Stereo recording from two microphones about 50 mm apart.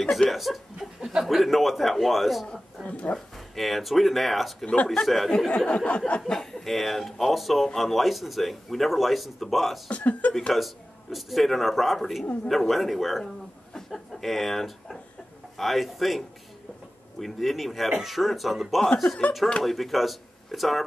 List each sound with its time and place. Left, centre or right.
0.3 s speech: centre
0.7 s chuckle: centre
1.2 s speech: centre
2.4 s a man's voice: centre
3.5 s speech: centre
5.7 s a sound: left
6.3 s speech: centre
9.8 s a sound: left
10.5 s speech: centre